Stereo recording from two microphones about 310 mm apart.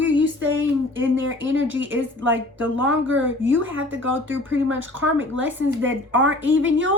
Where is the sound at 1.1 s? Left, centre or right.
Right.